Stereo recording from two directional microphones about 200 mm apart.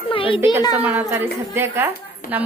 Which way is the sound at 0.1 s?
25° left (ahead or behind).